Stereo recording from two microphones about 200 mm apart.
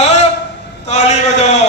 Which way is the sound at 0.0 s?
35° left (ahead or behind).